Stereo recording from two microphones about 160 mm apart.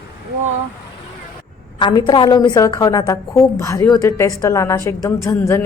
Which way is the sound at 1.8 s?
30° left (ahead or behind).